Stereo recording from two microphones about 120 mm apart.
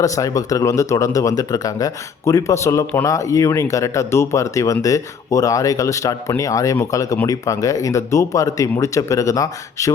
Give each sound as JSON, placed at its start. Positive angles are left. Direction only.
{"t": 0.0, "sound": "speech", "side_deg": 30}